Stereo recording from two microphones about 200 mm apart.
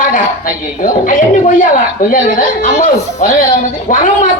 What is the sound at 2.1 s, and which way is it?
A man's voice, 40° left (ahead or behind).